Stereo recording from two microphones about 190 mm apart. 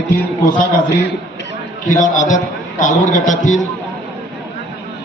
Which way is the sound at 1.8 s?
40° left (ahead or behind).